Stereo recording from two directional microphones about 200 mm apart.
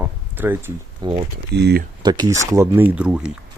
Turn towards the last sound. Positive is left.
turn(degrees=-5)  # may be behind; listen again after turning